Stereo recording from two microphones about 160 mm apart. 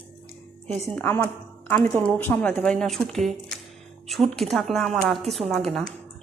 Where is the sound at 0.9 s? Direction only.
15° left (ahead or behind).